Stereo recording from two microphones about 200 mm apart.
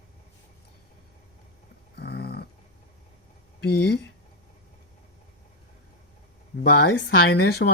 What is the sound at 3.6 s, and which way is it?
Speech, 55° left (ahead or behind).